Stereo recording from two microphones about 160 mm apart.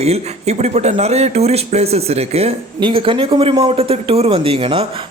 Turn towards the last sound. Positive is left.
turn(degrees=-35)  # may be behind; listen again after turning